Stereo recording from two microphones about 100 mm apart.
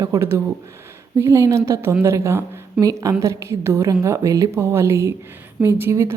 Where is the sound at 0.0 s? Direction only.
30° right (ahead or behind).